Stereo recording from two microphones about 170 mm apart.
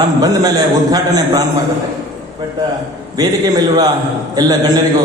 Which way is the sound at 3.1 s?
25° right (ahead or behind).